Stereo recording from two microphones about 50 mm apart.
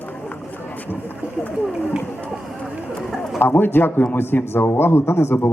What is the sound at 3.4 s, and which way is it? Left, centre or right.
A man's voice, left.